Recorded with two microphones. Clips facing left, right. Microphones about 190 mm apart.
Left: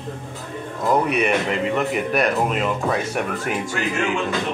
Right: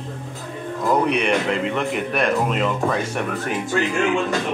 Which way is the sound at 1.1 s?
5° left (ahead or behind).